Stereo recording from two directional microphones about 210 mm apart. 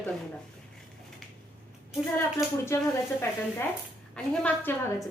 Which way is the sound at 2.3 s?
10° left (ahead or behind).